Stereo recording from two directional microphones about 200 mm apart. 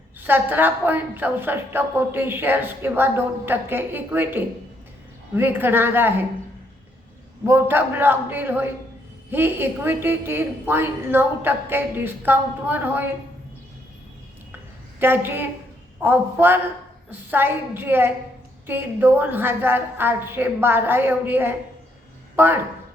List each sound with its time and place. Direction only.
0.2 s a woman's voice: 10° right (ahead or behind)
7.4 s a woman's voice: 10° right (ahead or behind)
14.9 s a woman's voice: 10° right (ahead or behind)